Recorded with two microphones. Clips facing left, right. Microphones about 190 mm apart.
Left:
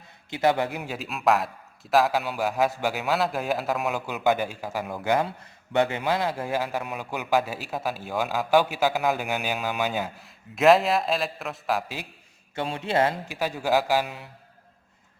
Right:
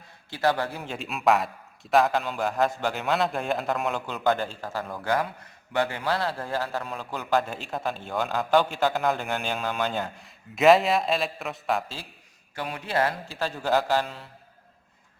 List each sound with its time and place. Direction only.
0.3 s a man's voice: 20° left (ahead or behind)
0.8 s a man's voice: 5° left (ahead or behind)
12.5 s a man's voice: 25° left (ahead or behind)